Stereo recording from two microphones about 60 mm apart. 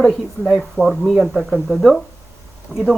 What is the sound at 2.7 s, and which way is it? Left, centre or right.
Speech, right.